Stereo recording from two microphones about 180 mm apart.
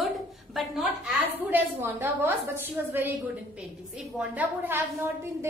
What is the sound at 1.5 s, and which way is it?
A woman's voice, 10° right (ahead or behind).